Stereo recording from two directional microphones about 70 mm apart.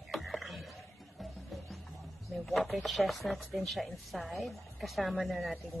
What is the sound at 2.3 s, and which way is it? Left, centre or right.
A woman's voice, centre.